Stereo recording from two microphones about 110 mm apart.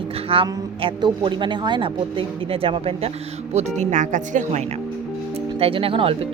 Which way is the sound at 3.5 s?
90° right.